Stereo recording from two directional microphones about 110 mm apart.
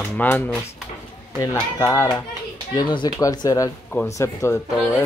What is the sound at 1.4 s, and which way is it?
Speech, 30° left (ahead or behind).